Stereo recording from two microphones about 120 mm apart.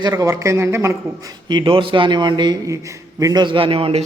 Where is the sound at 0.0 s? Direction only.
30° right (ahead or behind); by 4.0 s 50° right (ahead or behind).